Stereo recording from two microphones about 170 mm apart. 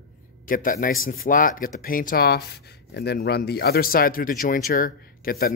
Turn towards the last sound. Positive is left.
turn(degrees=60)  # may be behind; listen again after turning